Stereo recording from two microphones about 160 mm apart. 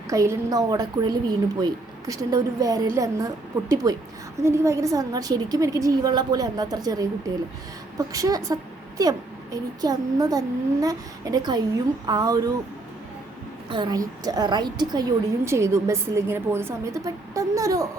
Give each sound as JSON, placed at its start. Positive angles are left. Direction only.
{"t": 0.1, "sound": "a woman's voice", "side_deg": -20}
{"t": 13.7, "sound": "a woman's voice", "side_deg": -25}